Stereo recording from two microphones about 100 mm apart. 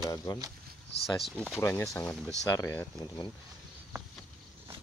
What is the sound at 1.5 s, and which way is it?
Speech, 25° left (ahead or behind).